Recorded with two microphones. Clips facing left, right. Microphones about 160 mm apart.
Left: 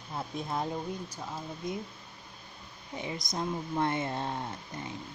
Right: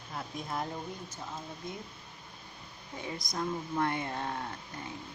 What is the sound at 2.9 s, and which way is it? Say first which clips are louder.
Speech: left 2 dB; 20° left (ahead or behind).